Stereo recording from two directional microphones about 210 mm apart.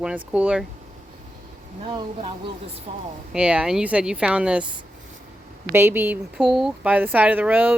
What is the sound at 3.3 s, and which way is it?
Speech, 5° right (ahead or behind).